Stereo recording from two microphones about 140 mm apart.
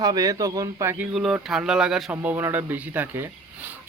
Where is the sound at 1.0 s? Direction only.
5° right (ahead or behind).